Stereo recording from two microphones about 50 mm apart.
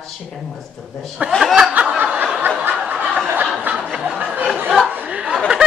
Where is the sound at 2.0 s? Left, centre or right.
Right.